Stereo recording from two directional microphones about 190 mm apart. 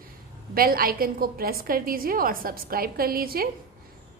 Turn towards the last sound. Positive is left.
turn(degrees=-50)  # may be behind; listen again after turning